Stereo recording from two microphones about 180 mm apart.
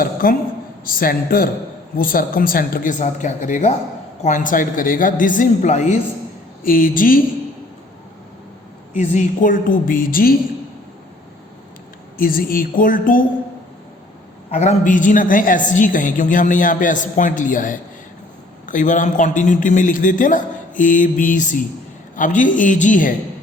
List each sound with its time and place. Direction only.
0.0 s a sound: 55° left (ahead or behind)
0.9 s a woman's voice: 55° left (ahead or behind)
6.6 s a woman's voice: 50° left (ahead or behind)
8.9 s a woman's voice: 45° left (ahead or behind)
12.1 s a woman's voice: 55° left (ahead or behind)
14.5 s a woman's voice: 40° left (ahead or behind)